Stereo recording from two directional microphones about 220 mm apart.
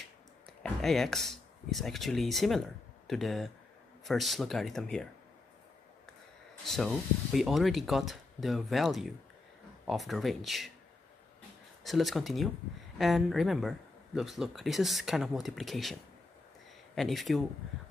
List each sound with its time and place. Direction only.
0.5 s speech: 5° left (ahead or behind)
6.6 s speech: centre (ahead or behind)
11.8 s speech: centre (ahead or behind)